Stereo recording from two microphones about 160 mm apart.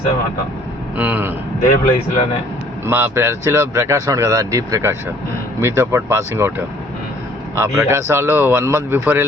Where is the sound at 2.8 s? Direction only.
15° right (ahead or behind).